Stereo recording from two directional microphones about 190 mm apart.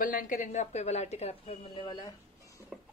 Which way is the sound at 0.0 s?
45° left (ahead or behind).